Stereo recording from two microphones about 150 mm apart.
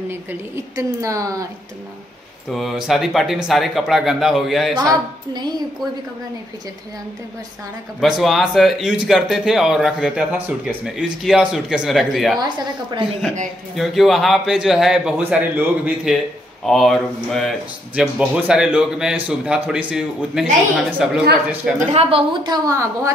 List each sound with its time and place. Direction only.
0.1 s a woman's voice: 20° right (ahead or behind)
2.5 s speech: centre (ahead or behind)
4.7 s a woman's voice: 30° right (ahead or behind)
8.0 s speech: centre (ahead or behind)
12.4 s a woman's voice: 30° right (ahead or behind)
13.7 s speech: centre (ahead or behind)
21.7 s a woman's voice: 40° right (ahead or behind)
22.7 s a woman's voice: 20° right (ahead or behind)